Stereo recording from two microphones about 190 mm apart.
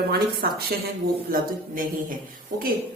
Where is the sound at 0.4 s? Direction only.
55° right (ahead or behind).